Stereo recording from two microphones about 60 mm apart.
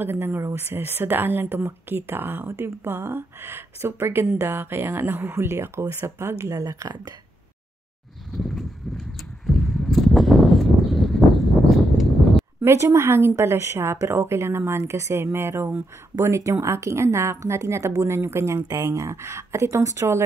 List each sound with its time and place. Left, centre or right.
0.0 s speech: right
6.6 s speech: right
8.4 s a sound: centre
12.6 s a woman's voice: right